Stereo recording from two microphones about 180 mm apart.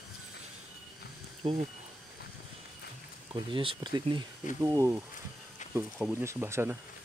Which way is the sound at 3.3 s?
30° right (ahead or behind).